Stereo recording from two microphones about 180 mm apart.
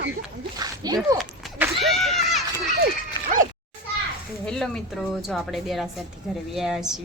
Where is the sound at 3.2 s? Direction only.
25° left (ahead or behind).